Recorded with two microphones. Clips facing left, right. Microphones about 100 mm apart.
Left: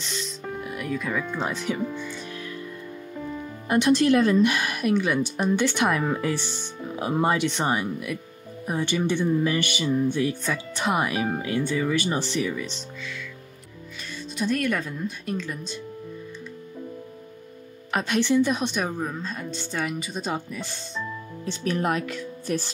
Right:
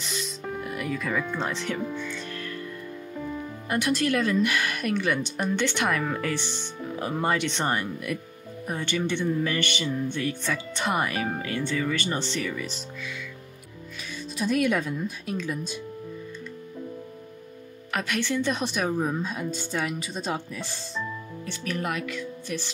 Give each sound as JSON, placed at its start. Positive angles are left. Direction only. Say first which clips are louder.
{"t": 0.0, "sound": "speech", "louder": "even", "side_deg": -5}
{"t": 2.0, "sound": "music", "louder": "even", "side_deg": 10}
{"t": 3.2, "sound": "music", "louder": "even", "side_deg": 0}
{"t": 3.6, "sound": "speech", "louder": "left 6 dB", "side_deg": 25}
{"t": 12.5, "sound": "speech", "louder": "left 1 dB", "side_deg": -5}
{"t": 14.4, "sound": "speech", "louder": "right 1 dB", "side_deg": -5}
{"t": 17.9, "sound": "speech", "louder": "left 6 dB", "side_deg": 25}
{"t": 21.5, "sound": "speech", "louder": "left 5 dB", "side_deg": 30}